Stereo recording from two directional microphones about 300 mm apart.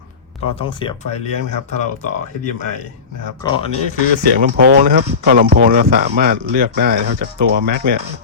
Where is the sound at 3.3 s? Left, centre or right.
Centre.